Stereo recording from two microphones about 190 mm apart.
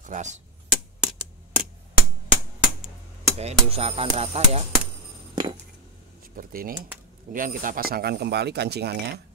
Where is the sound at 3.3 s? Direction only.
30° right (ahead or behind).